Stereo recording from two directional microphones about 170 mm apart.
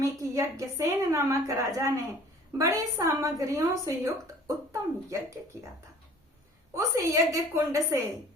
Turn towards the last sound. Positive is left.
turn(degrees=-15)  # may be behind; listen again after turning